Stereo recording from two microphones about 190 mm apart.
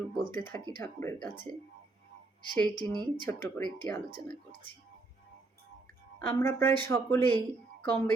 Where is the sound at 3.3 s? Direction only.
10° left (ahead or behind).